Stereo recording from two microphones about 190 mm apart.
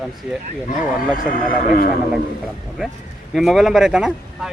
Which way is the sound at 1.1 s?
45° left (ahead or behind).